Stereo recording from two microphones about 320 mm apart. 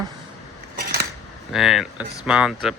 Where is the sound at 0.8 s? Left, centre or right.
Right.